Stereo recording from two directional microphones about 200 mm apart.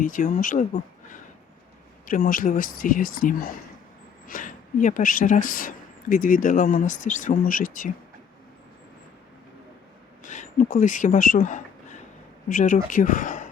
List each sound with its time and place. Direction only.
0.0 s speech: 40° left (ahead or behind)
10.2 s speech: 40° left (ahead or behind)